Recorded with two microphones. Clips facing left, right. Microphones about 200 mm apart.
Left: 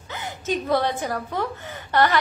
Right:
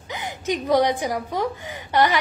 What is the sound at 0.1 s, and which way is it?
A woman's voice, 15° right (ahead or behind).